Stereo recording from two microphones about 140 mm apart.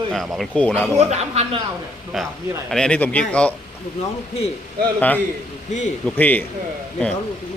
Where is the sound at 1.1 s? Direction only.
50° right (ahead or behind).